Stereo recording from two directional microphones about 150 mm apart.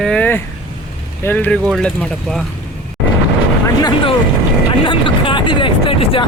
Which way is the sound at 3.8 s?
30° left (ahead or behind).